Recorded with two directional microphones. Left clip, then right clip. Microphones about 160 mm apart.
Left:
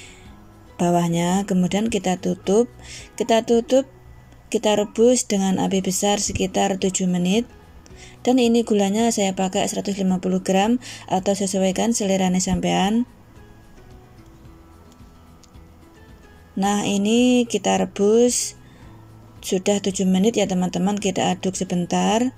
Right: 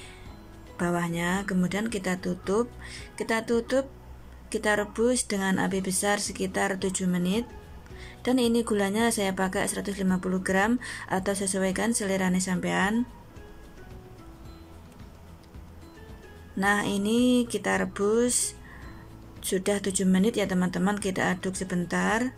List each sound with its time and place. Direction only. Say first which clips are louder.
0.7 s speech: left 8 dB; 15° left (ahead or behind)
16.5 s speech: left 3 dB; 15° left (ahead or behind)